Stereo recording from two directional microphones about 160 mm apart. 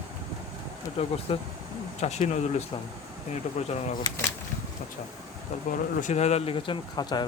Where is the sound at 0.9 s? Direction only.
40° left (ahead or behind).